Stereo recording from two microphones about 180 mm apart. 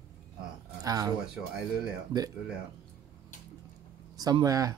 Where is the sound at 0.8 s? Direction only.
20° right (ahead or behind).